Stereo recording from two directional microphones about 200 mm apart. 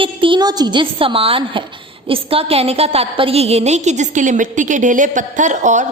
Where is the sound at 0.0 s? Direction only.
25° right (ahead or behind).